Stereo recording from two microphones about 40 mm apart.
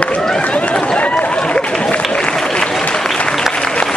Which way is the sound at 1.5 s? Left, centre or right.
Left.